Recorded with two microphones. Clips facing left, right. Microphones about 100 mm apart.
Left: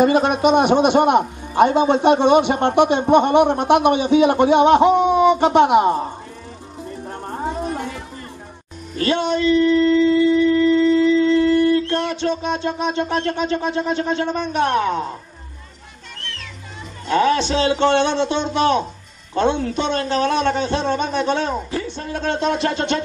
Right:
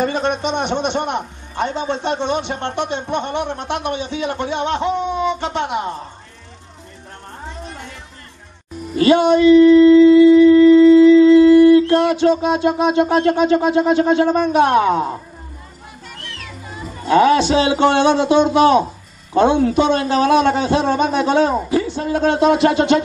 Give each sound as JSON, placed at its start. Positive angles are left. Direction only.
{"t": 0.0, "sound": "a man's voice", "side_deg": 10}
{"t": 7.4, "sound": "music", "side_deg": 50}
{"t": 8.9, "sound": "music", "side_deg": -10}
{"t": 14.3, "sound": "a man's voice", "side_deg": -10}
{"t": 16.2, "sound": "music", "side_deg": -10}
{"t": 18.5, "sound": "a man's voice", "side_deg": -10}